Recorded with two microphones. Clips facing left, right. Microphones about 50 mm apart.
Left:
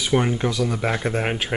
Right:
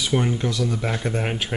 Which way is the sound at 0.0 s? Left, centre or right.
Centre.